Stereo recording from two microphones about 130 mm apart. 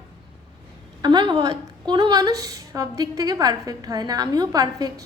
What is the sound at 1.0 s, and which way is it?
A woman's voice, 35° right (ahead or behind).